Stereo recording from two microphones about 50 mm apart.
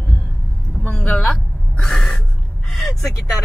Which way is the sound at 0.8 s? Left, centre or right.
Left.